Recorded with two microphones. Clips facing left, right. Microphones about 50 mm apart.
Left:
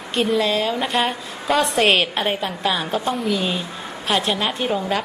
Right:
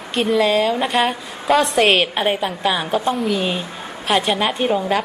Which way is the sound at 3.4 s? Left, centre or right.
Centre.